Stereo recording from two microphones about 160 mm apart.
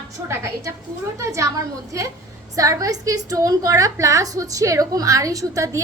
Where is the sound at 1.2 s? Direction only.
20° right (ahead or behind).